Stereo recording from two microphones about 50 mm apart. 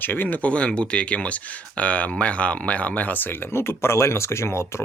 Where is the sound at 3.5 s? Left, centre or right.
Left.